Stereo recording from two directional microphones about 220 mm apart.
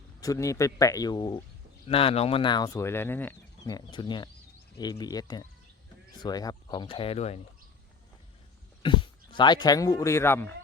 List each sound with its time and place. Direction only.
0.2 s speech: 15° left (ahead or behind)
8.8 s speech: 20° left (ahead or behind)